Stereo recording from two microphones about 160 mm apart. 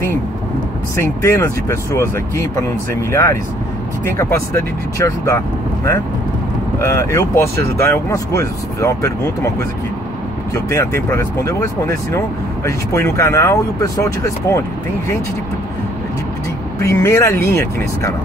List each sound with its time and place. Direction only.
0.9 s speech: 15° left (ahead or behind)
6.8 s speech: 20° left (ahead or behind)
16.8 s speech: 20° left (ahead or behind)